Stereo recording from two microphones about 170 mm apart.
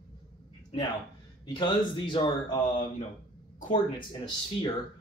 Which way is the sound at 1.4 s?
25° left (ahead or behind).